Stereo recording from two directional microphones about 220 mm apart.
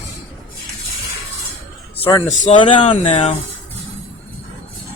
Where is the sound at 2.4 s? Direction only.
25° left (ahead or behind).